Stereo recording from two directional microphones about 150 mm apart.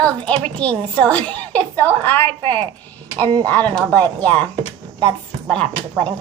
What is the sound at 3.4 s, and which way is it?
A woman's voice, 10° left (ahead or behind).